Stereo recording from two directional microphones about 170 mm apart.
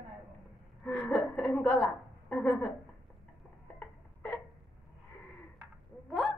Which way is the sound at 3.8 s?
10° left (ahead or behind).